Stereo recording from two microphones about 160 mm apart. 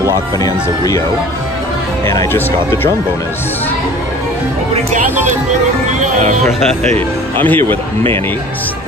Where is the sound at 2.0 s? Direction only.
15° left (ahead or behind).